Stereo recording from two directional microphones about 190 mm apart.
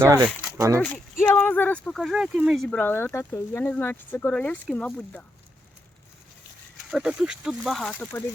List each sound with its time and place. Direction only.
0.0 s speech: 20° right (ahead or behind)
1.2 s speech: 10° left (ahead or behind)
6.9 s speech: 5° right (ahead or behind)